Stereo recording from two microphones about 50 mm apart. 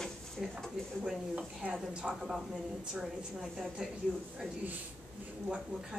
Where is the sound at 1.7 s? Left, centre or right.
Right.